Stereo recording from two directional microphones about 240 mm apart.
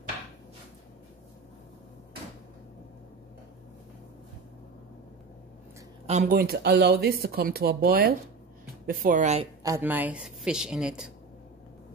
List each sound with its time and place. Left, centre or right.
6.0 s speech: right
9.6 s speech: centre